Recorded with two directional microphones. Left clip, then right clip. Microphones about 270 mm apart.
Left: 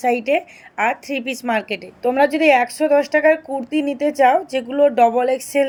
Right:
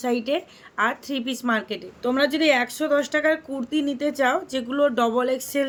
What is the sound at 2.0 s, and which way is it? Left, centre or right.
A woman's voice, centre.